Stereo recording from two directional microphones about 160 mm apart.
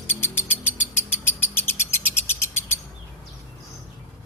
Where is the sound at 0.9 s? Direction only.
15° left (ahead or behind).